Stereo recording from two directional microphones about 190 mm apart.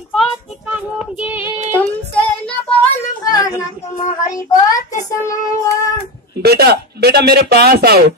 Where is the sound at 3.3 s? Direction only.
20° left (ahead or behind).